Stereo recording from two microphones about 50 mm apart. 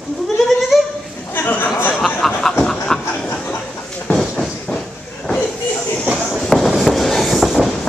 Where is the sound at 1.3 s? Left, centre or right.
Left.